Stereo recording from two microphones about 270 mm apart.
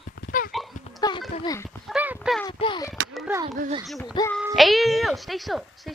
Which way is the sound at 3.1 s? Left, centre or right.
Centre.